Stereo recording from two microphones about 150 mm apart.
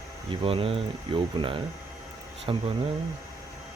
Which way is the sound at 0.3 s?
35° right (ahead or behind).